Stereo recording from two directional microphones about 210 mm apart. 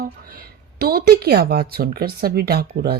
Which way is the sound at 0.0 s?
45° right (ahead or behind).